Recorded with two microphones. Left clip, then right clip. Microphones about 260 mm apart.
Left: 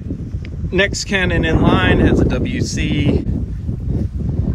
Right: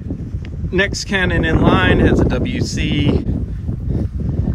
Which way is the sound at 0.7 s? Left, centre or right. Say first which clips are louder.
Left 1 dB; centre.